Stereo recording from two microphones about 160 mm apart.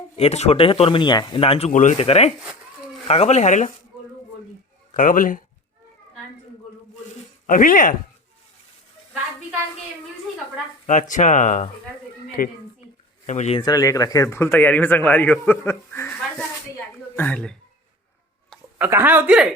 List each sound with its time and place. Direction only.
0.2 s speech: 40° left (ahead or behind)
4.9 s speech: 55° left (ahead or behind)
7.4 s speech: 55° left (ahead or behind)
11.1 s speech: 50° left (ahead or behind)
12.4 s speech: 65° left (ahead or behind)
13.2 s speech: 45° left (ahead or behind)
13.6 s speech: 25° left (ahead or behind); by 17.6 s 5° left (ahead or behind)
18.8 s speech: 15° right (ahead or behind)